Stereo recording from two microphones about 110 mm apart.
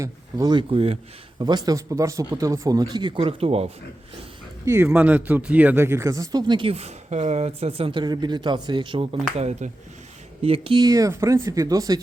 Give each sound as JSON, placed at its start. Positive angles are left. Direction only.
{"t": 0.0, "sound": "speech", "side_deg": -35}
{"t": 0.7, "sound": "speech", "side_deg": -65}
{"t": 1.4, "sound": "speech", "side_deg": -40}
{"t": 3.2, "sound": "speech", "side_deg": -60}
{"t": 4.6, "sound": "speech", "side_deg": -25}
{"t": 6.7, "sound": "speech", "side_deg": -75}
{"t": 9.3, "sound": "speech", "side_deg": -85}
{"t": 10.4, "sound": "speech", "side_deg": -55}
{"t": 10.8, "sound": "speech", "side_deg": -30}